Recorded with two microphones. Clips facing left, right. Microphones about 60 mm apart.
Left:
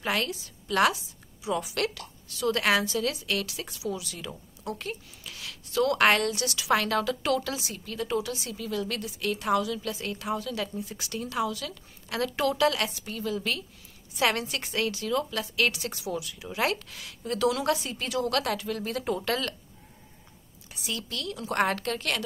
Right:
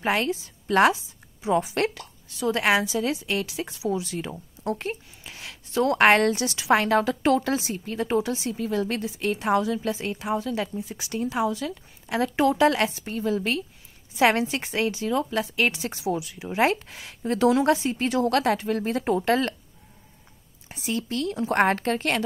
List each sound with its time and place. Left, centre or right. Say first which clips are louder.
0.0 s a woman's voice: right 5 dB; right
20.6 s speech: right 7 dB; right